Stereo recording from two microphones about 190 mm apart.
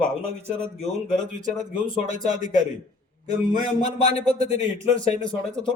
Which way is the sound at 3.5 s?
35° left (ahead or behind).